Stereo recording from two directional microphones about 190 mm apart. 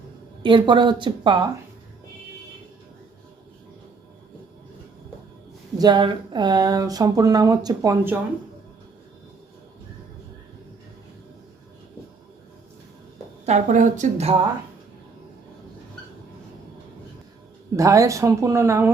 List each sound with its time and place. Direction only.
0.4 s speech: 25° right (ahead or behind)
5.7 s speech: 20° right (ahead or behind)
13.4 s speech: 40° right (ahead or behind)
17.7 s speech: 15° right (ahead or behind)